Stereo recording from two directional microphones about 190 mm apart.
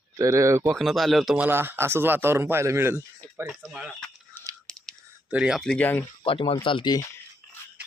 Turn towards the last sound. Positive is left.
turn(degrees=20)  # may be behind; listen again after turning